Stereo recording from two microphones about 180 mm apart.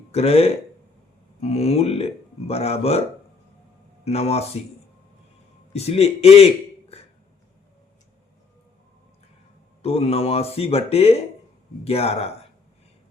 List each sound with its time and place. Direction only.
0.1 s a man's voice: 35° left (ahead or behind)
4.0 s speech: 35° left (ahead or behind)
5.7 s a man's voice: 35° left (ahead or behind)
9.8 s speech: 35° left (ahead or behind)